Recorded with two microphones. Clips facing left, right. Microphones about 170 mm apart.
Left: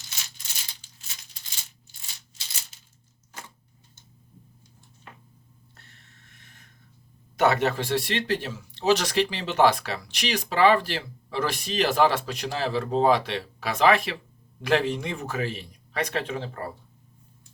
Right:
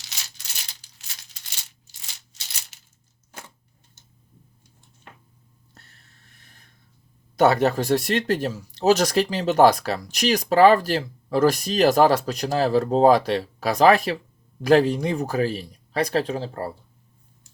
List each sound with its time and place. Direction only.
1.9 s maraca: 90° right
5.7 s a sound: 35° right (ahead or behind)
7.3 s speech: 35° right (ahead or behind)